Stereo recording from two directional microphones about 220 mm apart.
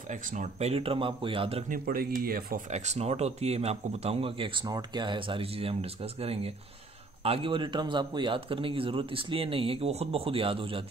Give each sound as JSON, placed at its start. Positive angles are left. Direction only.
{"t": 0.1, "sound": "speech", "side_deg": -35}